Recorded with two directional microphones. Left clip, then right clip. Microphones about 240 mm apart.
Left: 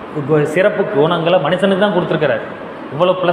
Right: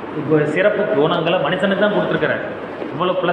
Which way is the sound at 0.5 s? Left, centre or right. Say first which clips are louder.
Left 2 dB; left.